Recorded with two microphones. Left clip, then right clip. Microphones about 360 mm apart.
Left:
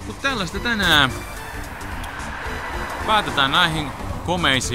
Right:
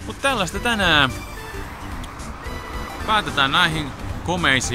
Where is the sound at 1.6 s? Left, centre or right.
Left.